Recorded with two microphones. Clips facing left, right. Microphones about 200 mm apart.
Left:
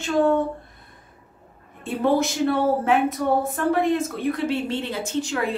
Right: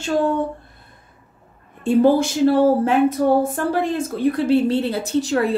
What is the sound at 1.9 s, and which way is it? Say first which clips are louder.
Speech: right 6 dB; 30° right (ahead or behind).